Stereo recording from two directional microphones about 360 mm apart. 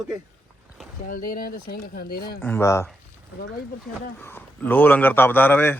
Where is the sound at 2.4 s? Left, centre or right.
Centre.